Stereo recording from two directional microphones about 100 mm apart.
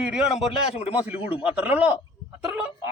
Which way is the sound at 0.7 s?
90° left.